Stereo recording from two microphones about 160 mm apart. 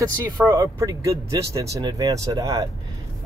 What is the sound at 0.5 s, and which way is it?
Speech, 20° right (ahead or behind).